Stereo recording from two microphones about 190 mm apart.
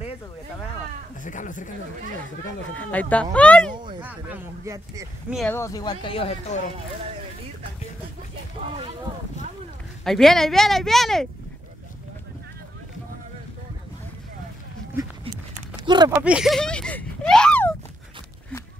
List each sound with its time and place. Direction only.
1.2 s speech: 40° left (ahead or behind)
2.7 s speech: 10° left (ahead or behind)
4.0 s speech: 10° right (ahead or behind)
5.5 s speech: 15° left (ahead or behind); by 6.6 s 35° left (ahead or behind)
10.0 s speech: centre (ahead or behind)
15.8 s a sound: 25° right (ahead or behind)
16.1 s a sound: 10° right (ahead or behind); by 17.7 s 5° left (ahead or behind)